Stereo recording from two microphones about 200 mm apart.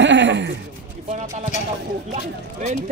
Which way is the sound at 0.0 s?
65° right (ahead or behind).